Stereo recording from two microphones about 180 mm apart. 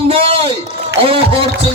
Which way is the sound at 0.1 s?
30° right (ahead or behind).